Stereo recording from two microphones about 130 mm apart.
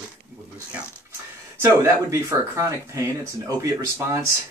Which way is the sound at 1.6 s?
25° right (ahead or behind).